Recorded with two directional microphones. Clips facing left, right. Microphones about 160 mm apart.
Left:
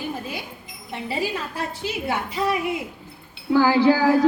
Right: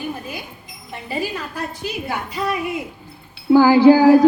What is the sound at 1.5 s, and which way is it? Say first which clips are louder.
A woman's voice: right 1 dB; 25° left (ahead or behind).